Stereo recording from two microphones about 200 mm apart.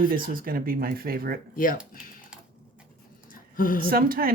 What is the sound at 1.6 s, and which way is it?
Speech, 45° left (ahead or behind).